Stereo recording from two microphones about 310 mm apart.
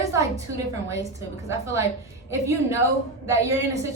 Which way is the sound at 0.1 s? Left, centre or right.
Centre.